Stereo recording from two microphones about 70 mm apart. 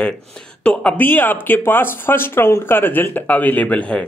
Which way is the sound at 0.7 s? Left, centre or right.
Left.